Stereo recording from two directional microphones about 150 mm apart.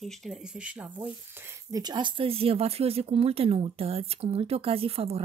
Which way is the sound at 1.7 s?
25° right (ahead or behind).